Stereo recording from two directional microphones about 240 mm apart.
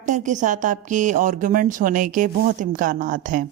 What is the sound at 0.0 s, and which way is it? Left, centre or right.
Speech, right.